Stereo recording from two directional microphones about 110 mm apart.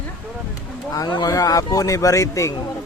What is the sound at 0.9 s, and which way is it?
Speech, 35° left (ahead or behind).